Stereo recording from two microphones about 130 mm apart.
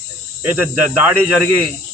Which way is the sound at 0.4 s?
15° right (ahead or behind).